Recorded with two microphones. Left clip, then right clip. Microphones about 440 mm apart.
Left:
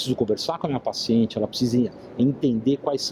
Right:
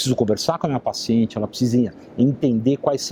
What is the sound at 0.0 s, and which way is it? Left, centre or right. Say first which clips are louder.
Speech: right 4 dB; right.